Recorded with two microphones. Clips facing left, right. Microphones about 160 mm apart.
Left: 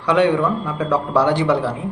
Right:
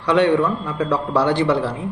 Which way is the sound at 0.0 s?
10° left (ahead or behind).